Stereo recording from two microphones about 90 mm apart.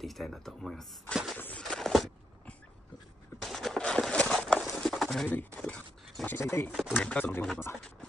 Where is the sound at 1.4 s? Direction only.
15° left (ahead or behind).